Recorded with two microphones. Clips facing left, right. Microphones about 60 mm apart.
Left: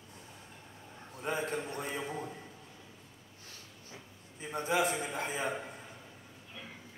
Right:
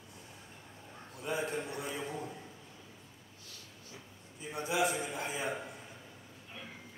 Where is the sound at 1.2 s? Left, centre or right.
Left.